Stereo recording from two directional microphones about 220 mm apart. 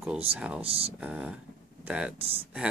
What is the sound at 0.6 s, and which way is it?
Speech, 25° right (ahead or behind).